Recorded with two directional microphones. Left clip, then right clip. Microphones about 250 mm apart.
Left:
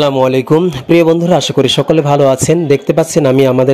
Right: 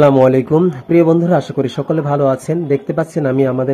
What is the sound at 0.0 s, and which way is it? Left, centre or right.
Speech, left.